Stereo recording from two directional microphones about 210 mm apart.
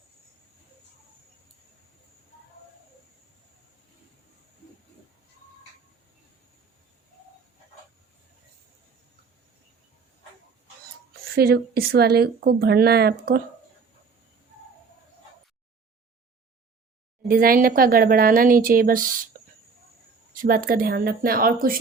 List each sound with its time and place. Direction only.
11.3 s a woman's voice: 50° right (ahead or behind)
17.2 s a woman's voice: 45° right (ahead or behind)
19.3 s cricket: 40° right (ahead or behind)
20.3 s a woman's voice: 40° right (ahead or behind)